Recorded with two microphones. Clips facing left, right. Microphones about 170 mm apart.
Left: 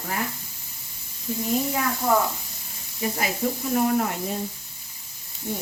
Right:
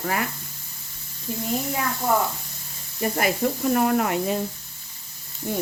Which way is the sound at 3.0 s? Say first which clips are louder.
Right 2 dB; 50° right (ahead or behind).